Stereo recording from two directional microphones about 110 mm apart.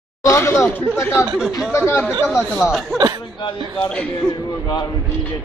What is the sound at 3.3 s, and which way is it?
Speech, 45° left (ahead or behind).